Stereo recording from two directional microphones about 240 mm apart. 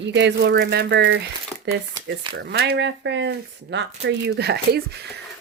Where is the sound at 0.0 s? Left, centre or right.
Right.